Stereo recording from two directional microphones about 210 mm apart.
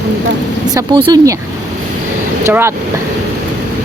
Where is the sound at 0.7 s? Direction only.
20° right (ahead or behind).